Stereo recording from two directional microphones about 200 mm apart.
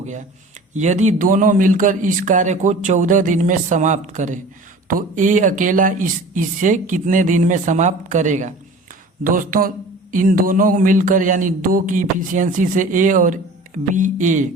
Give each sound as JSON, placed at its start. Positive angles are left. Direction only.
{"t": 0.7, "sound": "speech", "side_deg": -35}